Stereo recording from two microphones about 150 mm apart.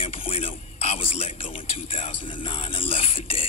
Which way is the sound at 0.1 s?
40° left (ahead or behind).